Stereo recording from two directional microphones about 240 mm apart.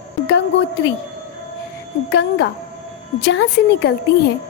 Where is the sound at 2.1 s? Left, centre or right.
Left.